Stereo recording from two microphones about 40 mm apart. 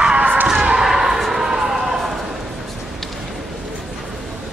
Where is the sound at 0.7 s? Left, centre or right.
Centre.